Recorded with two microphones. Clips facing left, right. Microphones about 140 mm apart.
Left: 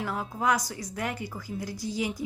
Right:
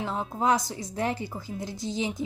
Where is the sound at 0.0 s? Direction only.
25° right (ahead or behind).